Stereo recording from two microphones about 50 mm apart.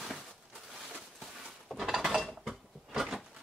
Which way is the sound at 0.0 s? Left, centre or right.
Centre.